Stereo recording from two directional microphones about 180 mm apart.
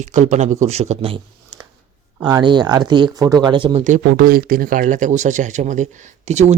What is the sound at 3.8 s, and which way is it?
Speech, 45° right (ahead or behind).